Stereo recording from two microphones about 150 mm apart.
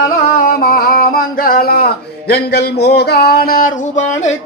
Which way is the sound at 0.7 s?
80° left.